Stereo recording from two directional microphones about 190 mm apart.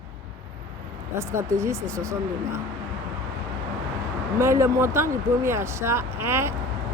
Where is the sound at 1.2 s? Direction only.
15° right (ahead or behind).